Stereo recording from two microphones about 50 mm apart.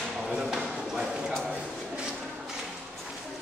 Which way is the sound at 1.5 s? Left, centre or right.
Centre.